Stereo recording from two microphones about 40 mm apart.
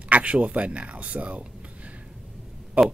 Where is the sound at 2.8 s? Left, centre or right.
Right.